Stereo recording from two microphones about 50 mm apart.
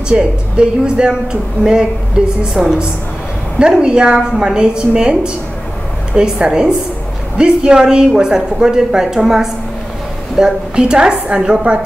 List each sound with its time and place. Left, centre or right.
0.1 s a woman's voice: centre